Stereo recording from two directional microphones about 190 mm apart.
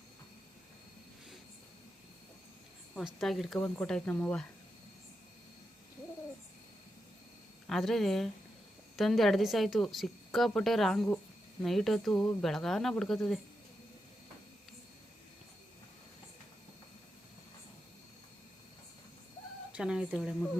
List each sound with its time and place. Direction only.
2.9 s a woman's voice: centre (ahead or behind)
7.7 s a woman's voice: centre (ahead or behind)
19.7 s a woman's voice: 5° right (ahead or behind)